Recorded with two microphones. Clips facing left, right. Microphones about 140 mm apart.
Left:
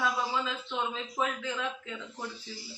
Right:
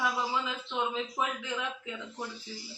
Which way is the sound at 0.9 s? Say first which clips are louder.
Even; 15° right (ahead or behind).